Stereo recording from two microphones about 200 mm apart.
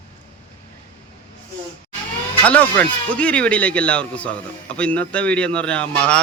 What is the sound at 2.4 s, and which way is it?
Speech, 5° left (ahead or behind).